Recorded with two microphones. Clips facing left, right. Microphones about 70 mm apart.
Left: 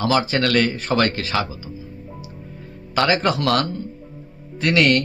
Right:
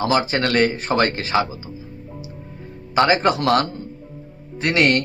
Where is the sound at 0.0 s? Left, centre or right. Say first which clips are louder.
Even; right.